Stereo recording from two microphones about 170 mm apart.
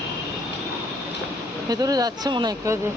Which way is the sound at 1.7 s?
20° right (ahead or behind).